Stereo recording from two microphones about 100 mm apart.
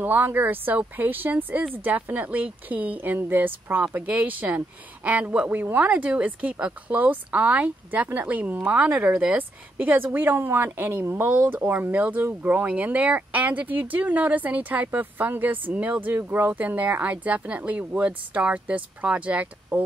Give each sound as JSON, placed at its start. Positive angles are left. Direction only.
{"t": 0.0, "sound": "speech", "side_deg": -20}